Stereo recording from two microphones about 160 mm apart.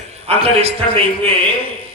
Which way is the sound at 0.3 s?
40° right (ahead or behind).